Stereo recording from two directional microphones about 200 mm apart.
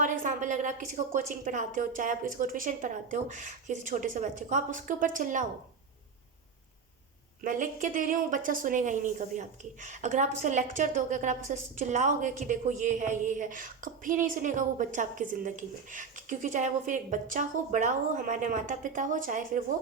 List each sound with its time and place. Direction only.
0.0 s a woman's voice: 40° right (ahead or behind)
7.4 s a woman's voice: 40° right (ahead or behind)